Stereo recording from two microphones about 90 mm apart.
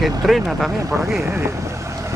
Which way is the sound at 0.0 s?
Centre (ahead or behind).